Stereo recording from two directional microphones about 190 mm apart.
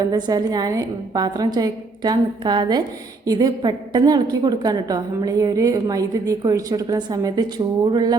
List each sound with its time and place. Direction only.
0.0 s a woman's voice: 20° right (ahead or behind)